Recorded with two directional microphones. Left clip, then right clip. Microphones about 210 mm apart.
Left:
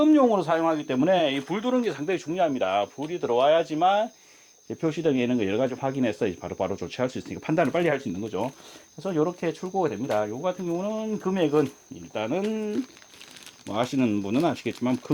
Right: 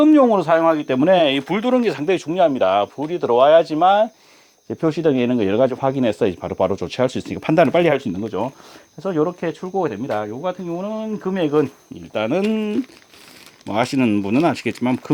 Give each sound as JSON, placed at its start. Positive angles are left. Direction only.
{"t": 0.0, "sound": "speech", "side_deg": -40}
{"t": 8.2, "sound": "speech", "side_deg": -30}
{"t": 12.1, "sound": "speech", "side_deg": -45}